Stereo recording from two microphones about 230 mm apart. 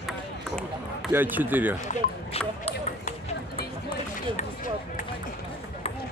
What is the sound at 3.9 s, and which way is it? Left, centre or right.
Run, left.